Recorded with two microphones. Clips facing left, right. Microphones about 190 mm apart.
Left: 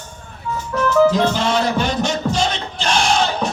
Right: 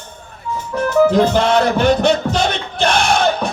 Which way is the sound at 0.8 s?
55° right (ahead or behind).